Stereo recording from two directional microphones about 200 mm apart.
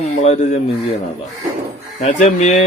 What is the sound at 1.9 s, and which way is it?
Speech, 35° left (ahead or behind).